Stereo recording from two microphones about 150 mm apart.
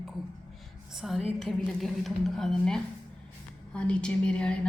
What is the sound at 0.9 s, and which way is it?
A woman's voice, centre (ahead or behind).